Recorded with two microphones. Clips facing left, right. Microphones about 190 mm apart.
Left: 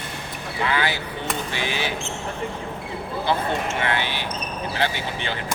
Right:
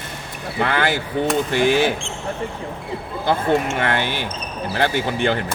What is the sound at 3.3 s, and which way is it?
Speech, 50° right (ahead or behind).